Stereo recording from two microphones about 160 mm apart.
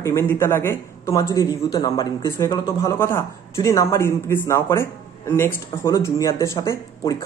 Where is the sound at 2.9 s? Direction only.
15° left (ahead or behind).